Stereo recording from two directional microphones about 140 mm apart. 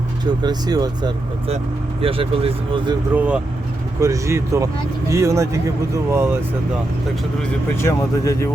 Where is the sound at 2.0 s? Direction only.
40° right (ahead or behind).